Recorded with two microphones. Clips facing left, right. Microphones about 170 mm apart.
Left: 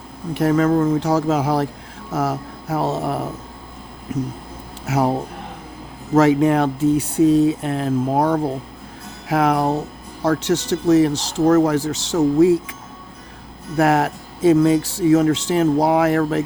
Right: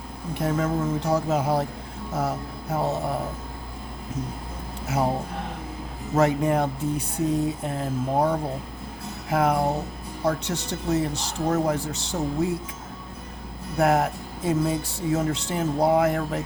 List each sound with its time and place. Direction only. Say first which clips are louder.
0.3 s speech: left 9 dB; 80° left
4.9 s speech: left 5 dB; 80° left
6.1 s speech: left 7 dB; 90° left
13.7 s speech: left 4 dB; 85° left